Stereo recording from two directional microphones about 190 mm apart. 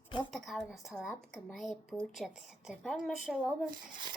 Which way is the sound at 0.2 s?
Centre (ahead or behind).